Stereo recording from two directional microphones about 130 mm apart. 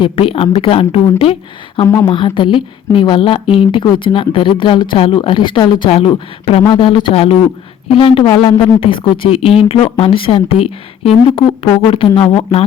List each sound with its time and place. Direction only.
0.0 s speech: 45° left (ahead or behind)
6.6 s speech: 35° left (ahead or behind)